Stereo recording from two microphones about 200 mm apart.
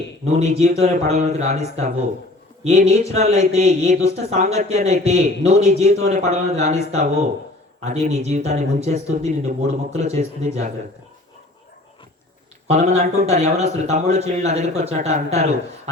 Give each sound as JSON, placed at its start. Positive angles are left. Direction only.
{"t": 0.3, "sound": "speech", "side_deg": -35}
{"t": 12.6, "sound": "speech", "side_deg": -35}